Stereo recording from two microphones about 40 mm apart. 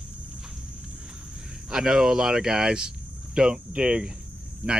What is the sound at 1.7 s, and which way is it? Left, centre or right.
Speech, centre.